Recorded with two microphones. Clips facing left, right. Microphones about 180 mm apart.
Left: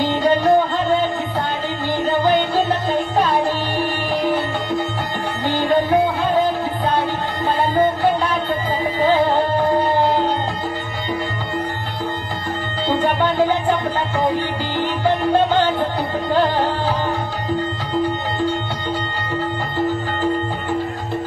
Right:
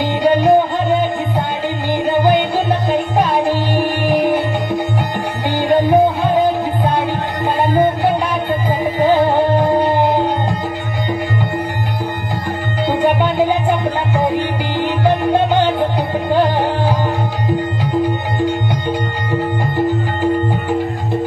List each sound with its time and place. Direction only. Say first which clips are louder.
0.0 s music: right 3 dB; 15° right (ahead or behind)
7.6 s music: right 2 dB; 15° right (ahead or behind)
12.8 s music: right 3 dB; 15° right (ahead or behind)
18.4 s music: right 5 dB; 15° right (ahead or behind)